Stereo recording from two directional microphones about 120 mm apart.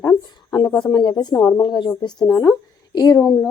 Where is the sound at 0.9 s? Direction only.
35° left (ahead or behind).